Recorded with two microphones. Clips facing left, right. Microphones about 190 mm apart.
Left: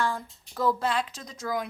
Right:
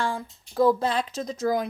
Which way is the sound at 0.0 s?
30° right (ahead or behind).